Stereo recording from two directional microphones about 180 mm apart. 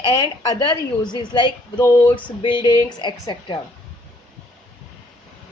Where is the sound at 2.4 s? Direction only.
25° left (ahead or behind).